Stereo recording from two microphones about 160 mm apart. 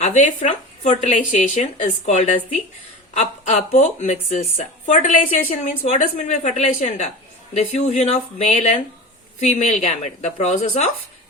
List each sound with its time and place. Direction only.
0.0 s a woman's voice: 45° left (ahead or behind)